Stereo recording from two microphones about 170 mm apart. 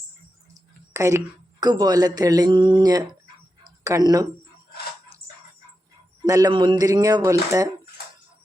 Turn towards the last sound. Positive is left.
turn(degrees=-20)  # may be behind; listen again after turning